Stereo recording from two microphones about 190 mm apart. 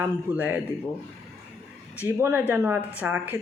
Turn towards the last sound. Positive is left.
turn(degrees=-10)  # may be behind; listen again after turning